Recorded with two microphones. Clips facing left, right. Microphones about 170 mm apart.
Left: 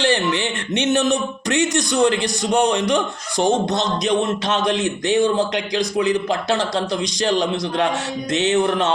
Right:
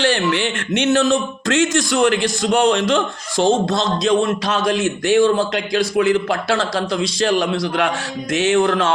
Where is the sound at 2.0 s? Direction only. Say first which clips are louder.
Right 2 dB; 70° right (ahead or behind).